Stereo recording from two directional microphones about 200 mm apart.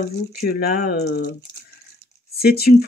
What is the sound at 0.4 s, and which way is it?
Speech, 50° left (ahead or behind).